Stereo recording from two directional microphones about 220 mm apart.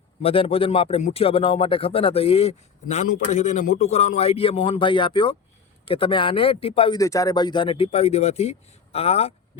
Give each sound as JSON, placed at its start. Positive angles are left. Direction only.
{"t": 0.2, "sound": "speech", "side_deg": 25}